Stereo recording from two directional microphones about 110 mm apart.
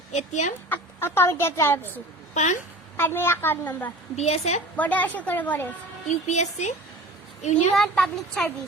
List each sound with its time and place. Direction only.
0.1 s speech: 90° left
0.7 s speech: 20° left (ahead or behind)
2.3 s speech: 90° left
3.0 s speech: 20° left (ahead or behind)
4.2 s a woman's voice: 80° left
4.8 s a woman's voice: 15° left (ahead or behind)
6.1 s speech: 90° left
7.7 s speech: centre (ahead or behind)